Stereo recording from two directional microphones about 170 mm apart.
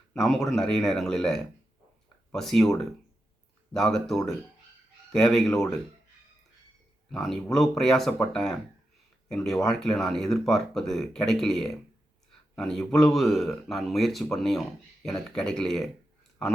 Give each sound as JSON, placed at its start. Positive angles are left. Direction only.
{"t": 0.1, "sound": "speech", "side_deg": 0}
{"t": 7.1, "sound": "speech", "side_deg": 0}